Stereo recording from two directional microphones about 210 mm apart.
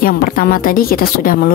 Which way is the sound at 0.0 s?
45° left (ahead or behind).